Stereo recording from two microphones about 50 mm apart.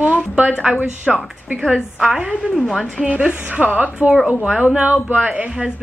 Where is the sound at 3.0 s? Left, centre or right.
Right.